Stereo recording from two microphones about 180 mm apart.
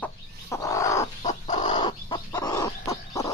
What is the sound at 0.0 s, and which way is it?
Bird, 15° left (ahead or behind).